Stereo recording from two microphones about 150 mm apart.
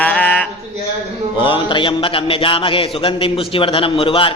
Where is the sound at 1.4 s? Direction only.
35° left (ahead or behind).